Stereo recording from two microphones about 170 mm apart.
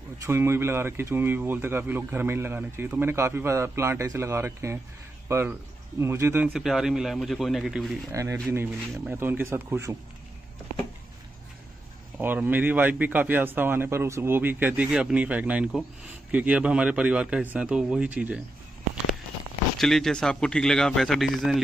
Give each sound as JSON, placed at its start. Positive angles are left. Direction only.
{"t": 0.2, "sound": "speech", "side_deg": -15}
{"t": 6.5, "sound": "a man's voice", "side_deg": -5}
{"t": 8.1, "sound": "speech", "side_deg": -20}
{"t": 12.2, "sound": "speech", "side_deg": -10}
{"t": 19.8, "sound": "a man's voice", "side_deg": 0}